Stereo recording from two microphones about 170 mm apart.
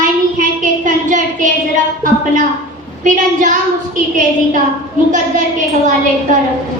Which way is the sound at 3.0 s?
50° right (ahead or behind).